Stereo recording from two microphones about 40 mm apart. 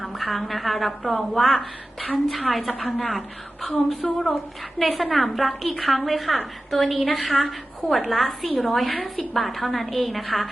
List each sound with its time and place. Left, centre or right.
0.0 s a woman's voice: centre
4.0 s speech: centre
4.8 s a woman's voice: centre